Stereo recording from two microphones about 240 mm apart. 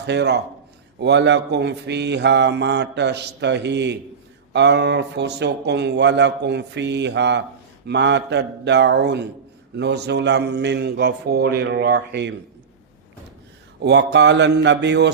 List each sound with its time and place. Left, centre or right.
0.0 s speech: right
13.8 s speech: right